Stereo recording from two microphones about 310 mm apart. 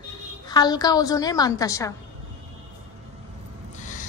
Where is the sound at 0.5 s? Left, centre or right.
Centre.